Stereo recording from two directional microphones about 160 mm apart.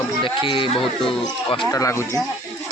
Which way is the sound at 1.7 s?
20° left (ahead or behind).